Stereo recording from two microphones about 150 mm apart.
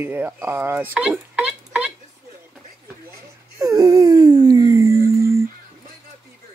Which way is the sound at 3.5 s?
25° right (ahead or behind).